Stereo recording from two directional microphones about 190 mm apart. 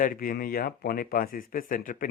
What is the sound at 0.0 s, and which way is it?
Speech, 45° left (ahead or behind).